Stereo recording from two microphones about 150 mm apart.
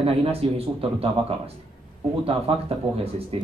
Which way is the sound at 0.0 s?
40° right (ahead or behind).